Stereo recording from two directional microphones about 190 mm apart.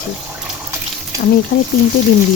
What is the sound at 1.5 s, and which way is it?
Speech, 50° left (ahead or behind).